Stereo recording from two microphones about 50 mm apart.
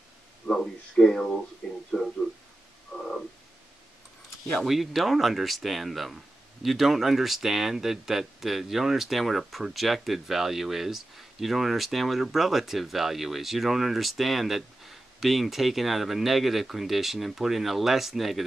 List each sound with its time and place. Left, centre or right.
0.5 s speech: centre
3.0 s frog: centre
4.6 s speech: centre